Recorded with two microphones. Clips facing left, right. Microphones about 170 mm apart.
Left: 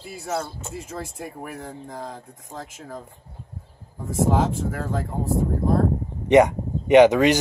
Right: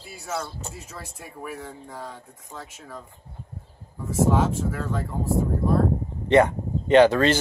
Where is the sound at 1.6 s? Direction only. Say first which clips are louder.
Left 3 dB; 40° left (ahead or behind).